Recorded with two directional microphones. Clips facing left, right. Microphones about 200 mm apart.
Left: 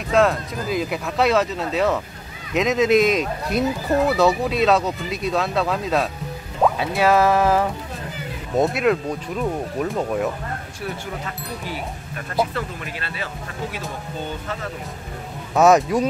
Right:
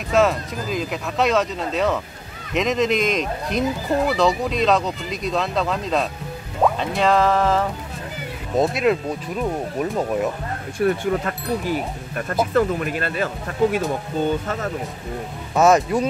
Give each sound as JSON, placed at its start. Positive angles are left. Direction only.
{"t": 0.1, "sound": "speech", "side_deg": 0}
{"t": 10.8, "sound": "speech", "side_deg": -55}
{"t": 15.5, "sound": "speech", "side_deg": 0}